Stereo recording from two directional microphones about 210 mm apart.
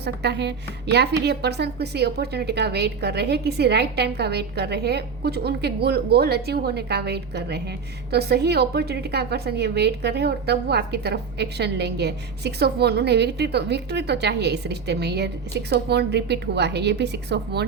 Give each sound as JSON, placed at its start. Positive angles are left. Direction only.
{"t": 0.0, "sound": "a woman's voice", "side_deg": -55}